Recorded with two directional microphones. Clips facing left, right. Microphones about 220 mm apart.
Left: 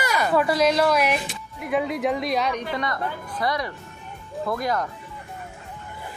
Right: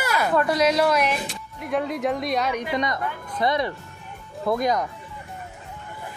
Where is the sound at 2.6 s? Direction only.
20° right (ahead or behind).